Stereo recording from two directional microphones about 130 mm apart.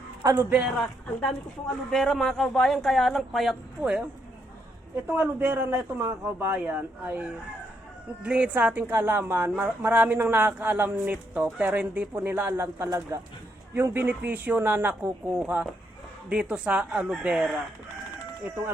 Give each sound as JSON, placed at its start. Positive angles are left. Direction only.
{"t": 0.2, "sound": "speech", "side_deg": -20}
{"t": 0.8, "sound": "a man's voice", "side_deg": 5}
{"t": 5.0, "sound": "a woman's voice", "side_deg": -10}